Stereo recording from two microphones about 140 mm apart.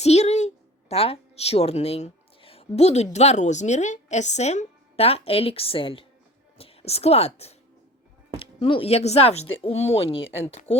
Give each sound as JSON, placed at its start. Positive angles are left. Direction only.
{"t": 0.0, "sound": "a woman's voice", "side_deg": 50}